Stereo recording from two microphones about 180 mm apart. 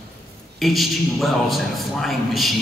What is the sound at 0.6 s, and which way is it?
A man's voice, centre (ahead or behind).